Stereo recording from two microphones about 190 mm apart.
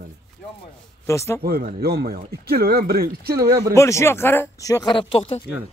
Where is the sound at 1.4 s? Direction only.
55° right (ahead or behind).